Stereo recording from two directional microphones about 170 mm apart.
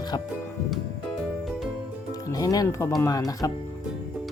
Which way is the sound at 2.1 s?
20° left (ahead or behind).